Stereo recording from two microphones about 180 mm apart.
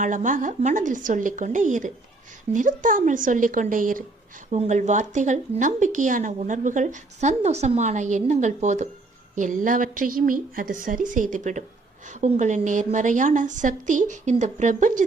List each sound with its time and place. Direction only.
0.0 s speech: 45° right (ahead or behind)